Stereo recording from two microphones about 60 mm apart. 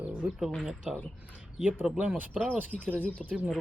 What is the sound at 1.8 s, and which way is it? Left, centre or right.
Speech, centre.